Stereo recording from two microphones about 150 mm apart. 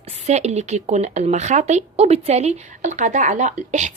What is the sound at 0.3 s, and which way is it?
A woman's voice, 45° right (ahead or behind).